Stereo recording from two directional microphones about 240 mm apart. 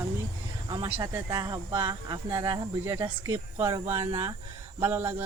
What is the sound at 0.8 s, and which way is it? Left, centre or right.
Speech, centre.